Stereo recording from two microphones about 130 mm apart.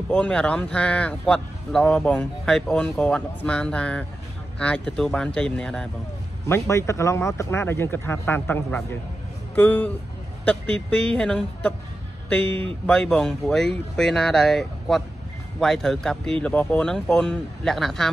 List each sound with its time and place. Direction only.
0.1 s speech: 10° left (ahead or behind)
6.4 s speech: 20° left (ahead or behind); by 18.1 s 5° left (ahead or behind)